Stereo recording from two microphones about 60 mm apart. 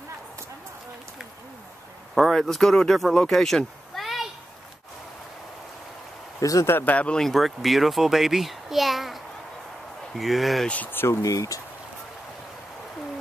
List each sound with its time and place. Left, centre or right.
2.3 s speech: centre
6.4 s speech: left
6.8 s speech: left
7.2 s a child's voice: centre
10.9 s speech: left
11.2 s speech: left